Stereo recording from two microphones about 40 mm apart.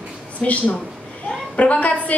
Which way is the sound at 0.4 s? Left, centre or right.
Left.